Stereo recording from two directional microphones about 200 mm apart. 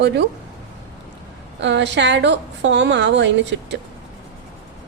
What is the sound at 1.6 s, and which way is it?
A woman's voice, 60° right (ahead or behind).